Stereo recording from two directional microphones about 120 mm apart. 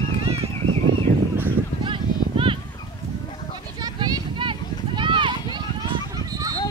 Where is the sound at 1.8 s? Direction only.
45° right (ahead or behind).